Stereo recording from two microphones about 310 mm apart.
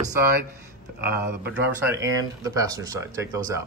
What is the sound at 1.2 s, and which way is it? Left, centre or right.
Speech, centre.